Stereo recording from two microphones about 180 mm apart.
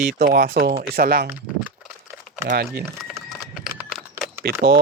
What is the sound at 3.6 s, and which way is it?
Typing, centre (ahead or behind).